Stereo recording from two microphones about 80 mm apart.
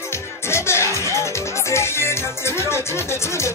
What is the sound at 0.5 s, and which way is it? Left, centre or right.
Music, left.